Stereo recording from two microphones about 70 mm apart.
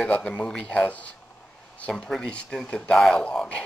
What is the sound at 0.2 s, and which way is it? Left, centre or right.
Speech, centre.